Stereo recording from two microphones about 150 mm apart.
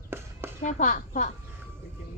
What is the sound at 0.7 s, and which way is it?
Speech, 60° left (ahead or behind).